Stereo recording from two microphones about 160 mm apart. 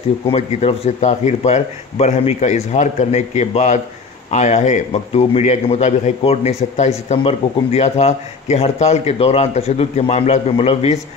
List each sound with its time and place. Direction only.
0.3 s speech: 45° left (ahead or behind)